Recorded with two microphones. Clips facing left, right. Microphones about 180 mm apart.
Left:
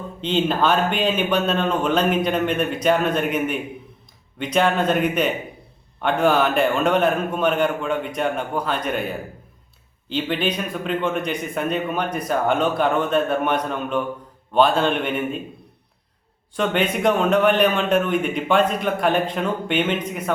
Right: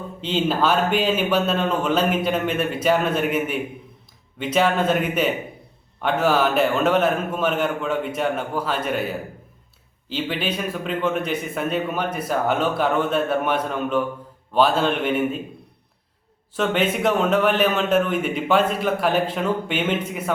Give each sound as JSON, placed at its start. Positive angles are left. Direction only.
{"t": 0.2, "sound": "speech", "side_deg": -5}
{"t": 16.6, "sound": "speech", "side_deg": -5}